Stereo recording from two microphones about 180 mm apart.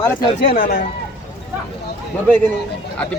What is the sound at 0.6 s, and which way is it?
Speech, 55° left (ahead or behind).